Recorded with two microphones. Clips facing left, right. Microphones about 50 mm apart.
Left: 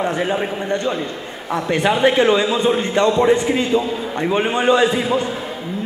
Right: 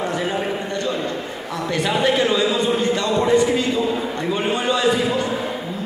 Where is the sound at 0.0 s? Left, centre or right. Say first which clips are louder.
Left 3 dB; left.